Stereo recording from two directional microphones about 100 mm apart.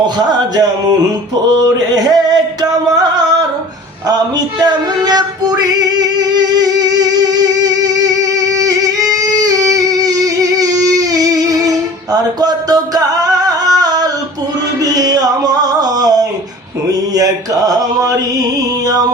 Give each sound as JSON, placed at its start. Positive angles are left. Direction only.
{"t": 0.3, "sound": "music", "side_deg": -40}
{"t": 4.6, "sound": "singing", "side_deg": -40}
{"t": 14.8, "sound": "music", "side_deg": -40}